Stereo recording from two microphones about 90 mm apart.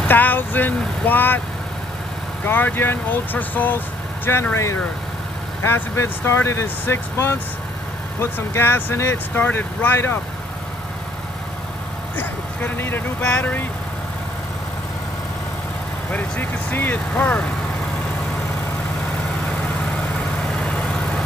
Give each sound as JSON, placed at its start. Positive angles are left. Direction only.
{"t": 0.1, "sound": "speech", "side_deg": 20}
{"t": 2.4, "sound": "speech", "side_deg": 25}
{"t": 12.2, "sound": "vehicle", "side_deg": 25}
{"t": 13.2, "sound": "speech", "side_deg": 15}
{"t": 16.1, "sound": "speech", "side_deg": 20}
{"t": 20.6, "sound": "vehicle", "side_deg": 10}